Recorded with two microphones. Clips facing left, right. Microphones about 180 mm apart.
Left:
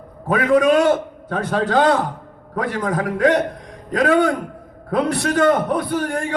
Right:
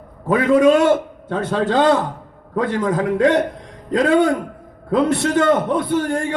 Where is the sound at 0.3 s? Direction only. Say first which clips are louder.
Right 2 dB; 25° right (ahead or behind).